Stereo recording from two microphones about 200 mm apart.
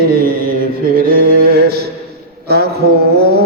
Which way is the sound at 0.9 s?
45° right (ahead or behind).